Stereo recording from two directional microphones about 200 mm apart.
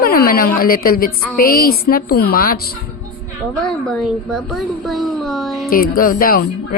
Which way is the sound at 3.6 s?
Centre (ahead or behind).